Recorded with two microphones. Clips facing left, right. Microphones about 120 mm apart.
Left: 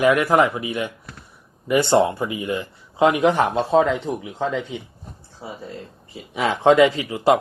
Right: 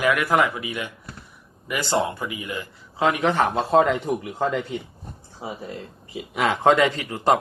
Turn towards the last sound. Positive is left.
turn(degrees=5)  # may be behind; listen again after turning